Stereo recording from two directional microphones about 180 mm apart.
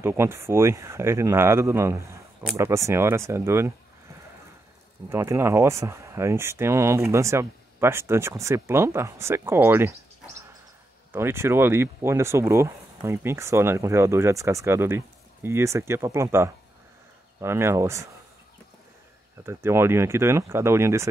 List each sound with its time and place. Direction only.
0.0 s speech: 15° right (ahead or behind)
5.1 s speech: 15° right (ahead or behind)
11.1 s speech: 15° right (ahead or behind)
19.4 s speech: 15° right (ahead or behind)